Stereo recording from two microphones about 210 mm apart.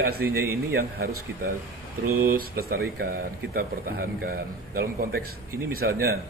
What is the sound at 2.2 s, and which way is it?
A man's voice, 45° right (ahead or behind).